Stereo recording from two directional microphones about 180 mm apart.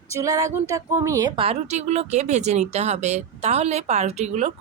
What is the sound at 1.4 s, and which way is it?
Speech, 35° right (ahead or behind).